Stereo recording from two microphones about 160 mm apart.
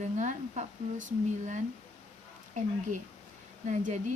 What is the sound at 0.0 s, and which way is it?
Speech, 50° right (ahead or behind).